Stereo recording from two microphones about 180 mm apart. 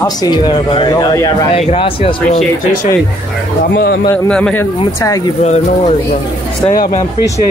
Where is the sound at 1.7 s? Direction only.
30° left (ahead or behind).